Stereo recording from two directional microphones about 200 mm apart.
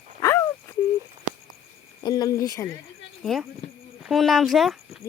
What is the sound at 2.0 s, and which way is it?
Speech, 20° left (ahead or behind).